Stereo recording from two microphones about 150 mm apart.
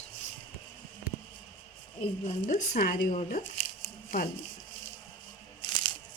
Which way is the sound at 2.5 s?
65° left (ahead or behind).